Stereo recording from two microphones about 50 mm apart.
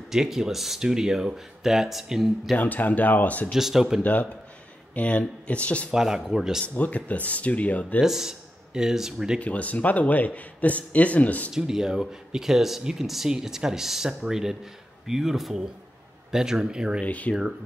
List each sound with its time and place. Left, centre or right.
0.1 s speech: centre
2.5 s speech: left
3.5 s speech: centre
4.0 s speech: left
5.9 s speech: centre
6.6 s speech: left
8.0 s speech: centre
9.4 s speech: left
11.5 s speech: centre
17.0 s speech: left